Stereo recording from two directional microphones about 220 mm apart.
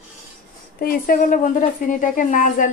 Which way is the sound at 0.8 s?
40° left (ahead or behind).